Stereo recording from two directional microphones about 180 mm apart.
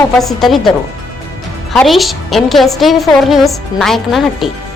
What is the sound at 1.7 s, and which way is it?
A woman's voice, centre (ahead or behind).